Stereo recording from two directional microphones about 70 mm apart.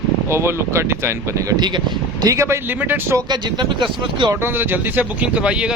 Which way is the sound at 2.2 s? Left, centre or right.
Right.